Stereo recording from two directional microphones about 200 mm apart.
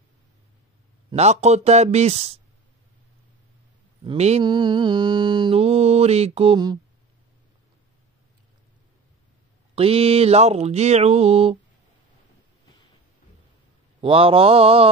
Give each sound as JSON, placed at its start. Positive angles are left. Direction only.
{"t": 1.1, "sound": "speech", "side_deg": -35}
{"t": 4.0, "sound": "mantra", "side_deg": -30}
{"t": 9.8, "sound": "speech", "side_deg": -30}
{"t": 14.0, "sound": "mantra", "side_deg": -25}